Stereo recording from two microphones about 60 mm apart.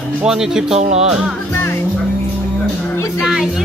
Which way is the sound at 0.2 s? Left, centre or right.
Centre.